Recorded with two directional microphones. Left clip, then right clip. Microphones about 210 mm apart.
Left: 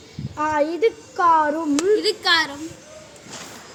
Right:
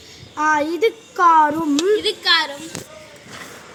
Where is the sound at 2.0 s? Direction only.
30° left (ahead or behind).